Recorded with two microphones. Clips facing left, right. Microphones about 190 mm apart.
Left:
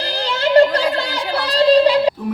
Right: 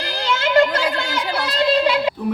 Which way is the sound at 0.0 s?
35° left (ahead or behind).